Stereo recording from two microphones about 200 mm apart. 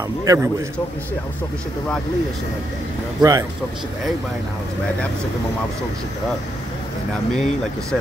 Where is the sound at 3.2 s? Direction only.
20° right (ahead or behind).